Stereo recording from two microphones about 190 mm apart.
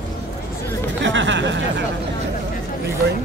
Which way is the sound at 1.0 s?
70° right (ahead or behind).